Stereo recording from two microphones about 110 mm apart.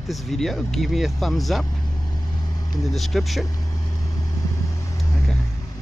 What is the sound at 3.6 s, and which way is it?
Vehicle, 30° left (ahead or behind).